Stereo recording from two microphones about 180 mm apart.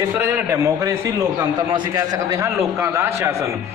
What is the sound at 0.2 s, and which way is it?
A man's voice, 15° right (ahead or behind).